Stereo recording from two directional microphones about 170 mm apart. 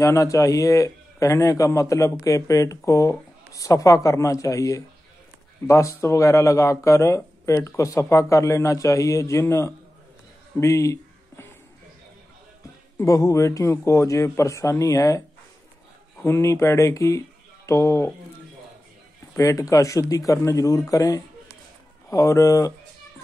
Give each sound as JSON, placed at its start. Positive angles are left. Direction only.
{"t": 0.0, "sound": "a man's voice", "side_deg": 20}
{"t": 10.6, "sound": "a sound", "side_deg": 20}
{"t": 13.0, "sound": "speech", "side_deg": 20}
{"t": 16.3, "sound": "speech", "side_deg": 15}
{"t": 19.3, "sound": "a man's voice", "side_deg": 20}